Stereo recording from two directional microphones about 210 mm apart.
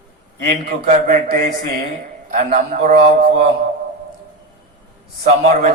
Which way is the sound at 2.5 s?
40° right (ahead or behind).